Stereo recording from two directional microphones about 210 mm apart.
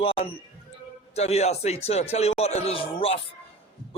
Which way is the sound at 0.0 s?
25° left (ahead or behind).